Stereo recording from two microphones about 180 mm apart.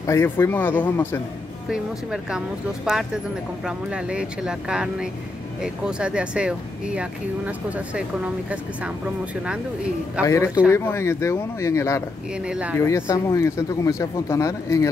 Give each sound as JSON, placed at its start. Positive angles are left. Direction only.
{"t": 0.0, "sound": "speech", "side_deg": 15}
{"t": 1.7, "sound": "speech", "side_deg": 0}
{"t": 10.2, "sound": "speech", "side_deg": 15}
{"t": 12.4, "sound": "speech", "side_deg": -5}
{"t": 12.8, "sound": "speech", "side_deg": 15}